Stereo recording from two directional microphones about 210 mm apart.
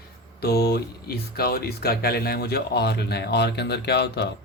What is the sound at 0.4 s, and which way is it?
Speech, 50° left (ahead or behind).